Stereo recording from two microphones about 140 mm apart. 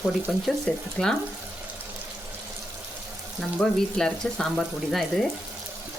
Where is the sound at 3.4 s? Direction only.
5° left (ahead or behind).